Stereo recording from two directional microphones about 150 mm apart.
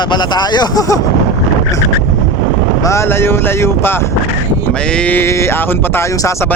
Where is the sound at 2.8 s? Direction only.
20° left (ahead or behind).